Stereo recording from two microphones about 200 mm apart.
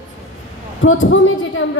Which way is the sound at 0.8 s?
75° left (ahead or behind).